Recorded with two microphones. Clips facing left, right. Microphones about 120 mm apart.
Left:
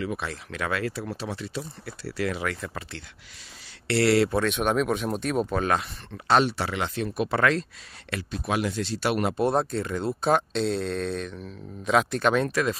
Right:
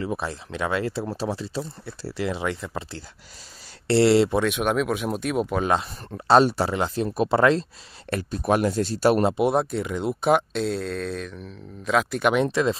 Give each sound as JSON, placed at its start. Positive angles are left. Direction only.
{"t": 0.0, "sound": "speech", "side_deg": -30}
{"t": 2.1, "sound": "speech", "side_deg": -25}
{"t": 4.4, "sound": "speech", "side_deg": -5}
{"t": 6.1, "sound": "speech", "side_deg": -35}
{"t": 8.1, "sound": "speech", "side_deg": -45}
{"t": 9.4, "sound": "speech", "side_deg": -10}
{"t": 10.6, "sound": "speech", "side_deg": -5}
{"t": 12.2, "sound": "speech", "side_deg": -10}
{"t": 12.4, "sound": "speech", "side_deg": -25}